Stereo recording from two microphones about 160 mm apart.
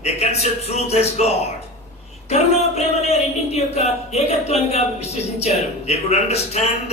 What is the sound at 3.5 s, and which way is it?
Speech, 45° left (ahead or behind).